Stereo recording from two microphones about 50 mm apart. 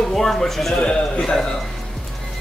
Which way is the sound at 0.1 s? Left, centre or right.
Centre.